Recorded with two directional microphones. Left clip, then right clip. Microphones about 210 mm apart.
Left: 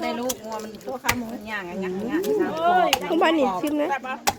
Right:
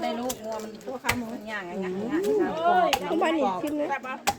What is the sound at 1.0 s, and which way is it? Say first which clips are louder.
Speech: left 3 dB; 45° left (ahead or behind).